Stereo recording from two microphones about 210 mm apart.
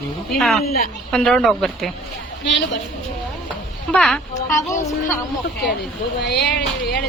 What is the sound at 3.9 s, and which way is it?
Speech, 5° left (ahead or behind).